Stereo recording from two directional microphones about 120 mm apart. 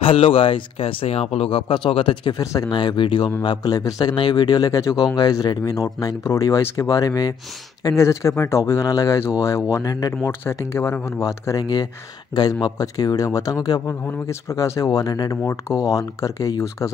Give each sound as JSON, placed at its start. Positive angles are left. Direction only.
{"t": 0.0, "sound": "speech", "side_deg": 50}